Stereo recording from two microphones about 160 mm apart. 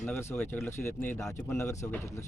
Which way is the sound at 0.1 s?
15° left (ahead or behind).